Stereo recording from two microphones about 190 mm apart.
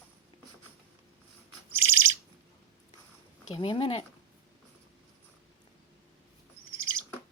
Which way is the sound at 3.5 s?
25° left (ahead or behind).